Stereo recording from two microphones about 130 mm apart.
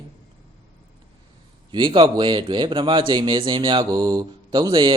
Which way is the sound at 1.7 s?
40° right (ahead or behind).